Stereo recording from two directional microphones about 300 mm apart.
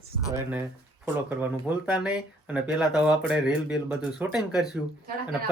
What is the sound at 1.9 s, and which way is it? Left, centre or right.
Speech, centre.